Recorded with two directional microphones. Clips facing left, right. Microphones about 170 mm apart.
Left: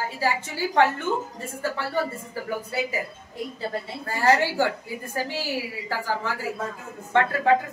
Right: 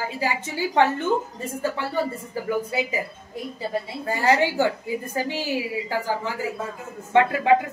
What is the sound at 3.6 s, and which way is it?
A woman's voice, 15° right (ahead or behind).